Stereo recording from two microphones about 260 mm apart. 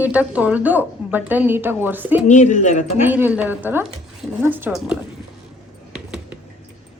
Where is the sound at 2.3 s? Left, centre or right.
Left.